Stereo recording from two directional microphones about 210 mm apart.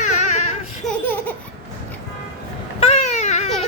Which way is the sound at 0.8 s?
10° left (ahead or behind).